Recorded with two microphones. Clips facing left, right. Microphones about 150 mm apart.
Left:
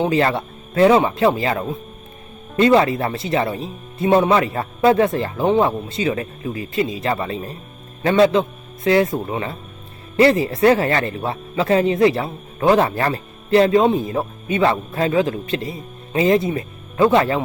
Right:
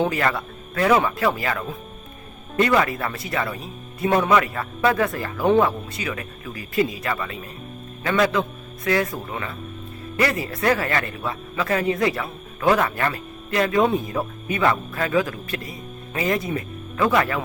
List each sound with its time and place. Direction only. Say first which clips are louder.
0.0 s speech: left 4 dB; 25° left (ahead or behind)